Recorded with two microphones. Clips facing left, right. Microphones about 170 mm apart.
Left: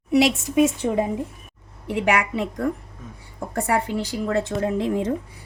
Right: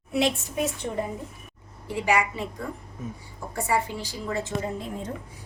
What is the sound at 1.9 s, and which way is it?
A woman's voice, 65° left (ahead or behind).